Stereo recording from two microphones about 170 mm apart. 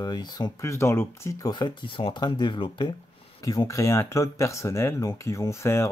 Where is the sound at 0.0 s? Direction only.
25° left (ahead or behind).